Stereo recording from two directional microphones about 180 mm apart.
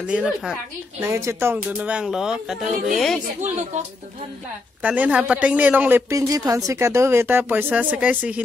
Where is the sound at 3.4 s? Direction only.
40° right (ahead or behind).